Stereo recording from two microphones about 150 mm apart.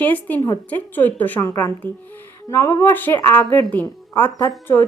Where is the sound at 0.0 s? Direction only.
10° left (ahead or behind).